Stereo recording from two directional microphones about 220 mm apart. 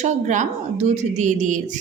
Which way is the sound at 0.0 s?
35° right (ahead or behind).